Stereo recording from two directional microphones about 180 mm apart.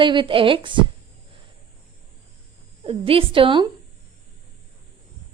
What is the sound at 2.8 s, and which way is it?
Speech, 30° right (ahead or behind).